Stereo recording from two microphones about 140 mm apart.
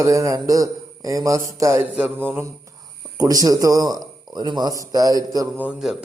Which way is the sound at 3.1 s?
25° right (ahead or behind).